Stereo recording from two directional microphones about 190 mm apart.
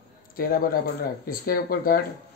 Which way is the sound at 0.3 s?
50° left (ahead or behind).